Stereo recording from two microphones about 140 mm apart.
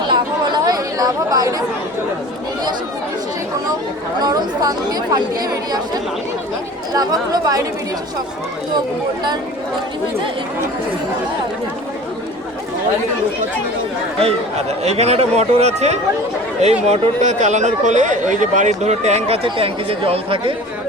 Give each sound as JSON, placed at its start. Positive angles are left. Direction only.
{"t": 0.1, "sound": "chatter", "side_deg": -30}
{"t": 4.2, "sound": "speech", "side_deg": -30}
{"t": 14.8, "sound": "speech", "side_deg": -50}